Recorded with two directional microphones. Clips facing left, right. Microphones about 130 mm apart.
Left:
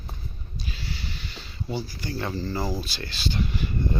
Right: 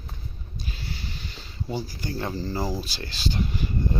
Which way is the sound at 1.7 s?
40° right (ahead or behind).